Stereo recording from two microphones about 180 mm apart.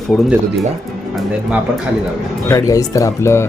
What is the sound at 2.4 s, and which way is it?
Speech, 20° left (ahead or behind).